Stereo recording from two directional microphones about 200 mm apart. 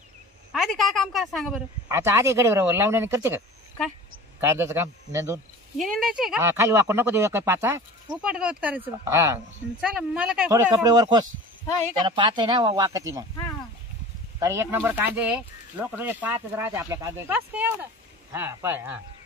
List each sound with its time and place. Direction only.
0.5 s a woman's voice: centre (ahead or behind)
1.9 s speech: 15° right (ahead or behind)
5.8 s speech: centre (ahead or behind)
6.4 s speech: 15° right (ahead or behind)
9.8 s speech: 5° right (ahead or behind)
10.5 s speech: 15° right (ahead or behind)
11.6 s speech: 15° left (ahead or behind)
12.0 s speech: 25° right (ahead or behind)
14.4 s speech: 15° right (ahead or behind)